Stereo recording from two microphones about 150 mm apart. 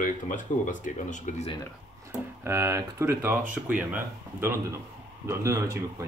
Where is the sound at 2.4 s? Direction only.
15° right (ahead or behind).